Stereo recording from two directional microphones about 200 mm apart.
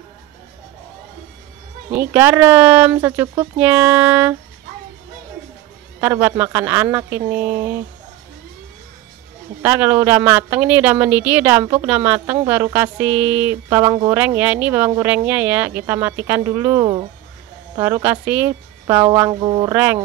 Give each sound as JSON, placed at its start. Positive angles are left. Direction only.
{"t": 1.9, "sound": "speech", "side_deg": -10}
{"t": 5.9, "sound": "speech", "side_deg": -10}
{"t": 9.6, "sound": "speech", "side_deg": -10}
{"t": 19.7, "sound": "speech", "side_deg": -10}